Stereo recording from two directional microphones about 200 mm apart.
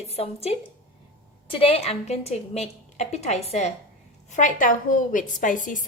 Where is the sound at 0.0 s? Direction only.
30° left (ahead or behind).